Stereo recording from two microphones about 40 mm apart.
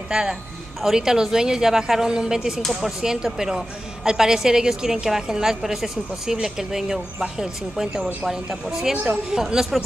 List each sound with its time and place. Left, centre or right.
0.1 s a woman's voice: centre